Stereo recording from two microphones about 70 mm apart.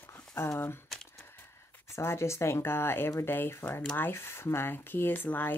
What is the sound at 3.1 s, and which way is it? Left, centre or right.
Speech, left.